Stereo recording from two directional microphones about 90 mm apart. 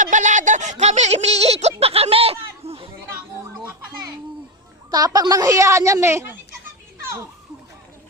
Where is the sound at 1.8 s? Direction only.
90° right.